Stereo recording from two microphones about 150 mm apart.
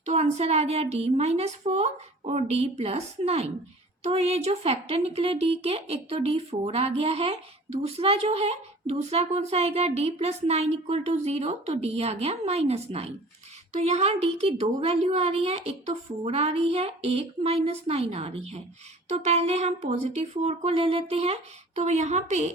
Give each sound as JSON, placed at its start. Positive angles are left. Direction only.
{"t": 0.0, "sound": "speech", "side_deg": -50}